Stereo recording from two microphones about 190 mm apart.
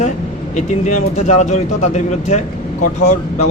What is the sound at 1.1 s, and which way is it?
Speech, 40° left (ahead or behind).